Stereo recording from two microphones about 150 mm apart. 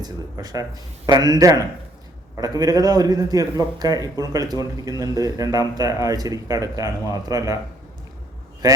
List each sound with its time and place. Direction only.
0.0 s speech: 25° right (ahead or behind)
8.6 s speech: 25° right (ahead or behind)